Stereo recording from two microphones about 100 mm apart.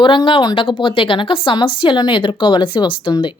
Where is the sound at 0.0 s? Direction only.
55° left (ahead or behind).